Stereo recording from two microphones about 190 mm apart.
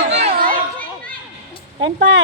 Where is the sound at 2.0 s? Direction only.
90° right.